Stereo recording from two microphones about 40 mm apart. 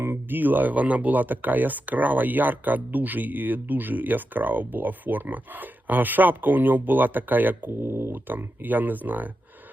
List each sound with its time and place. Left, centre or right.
0.0 s speech: right
7.7 s speech: right
8.1 s speech: right